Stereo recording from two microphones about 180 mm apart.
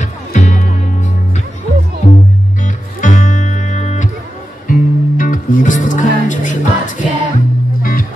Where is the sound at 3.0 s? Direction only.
45° left (ahead or behind).